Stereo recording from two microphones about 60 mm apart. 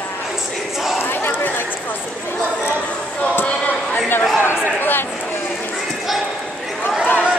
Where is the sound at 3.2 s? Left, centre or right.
Left.